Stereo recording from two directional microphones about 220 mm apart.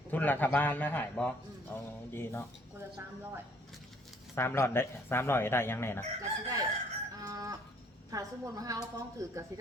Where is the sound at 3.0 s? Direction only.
10° right (ahead or behind).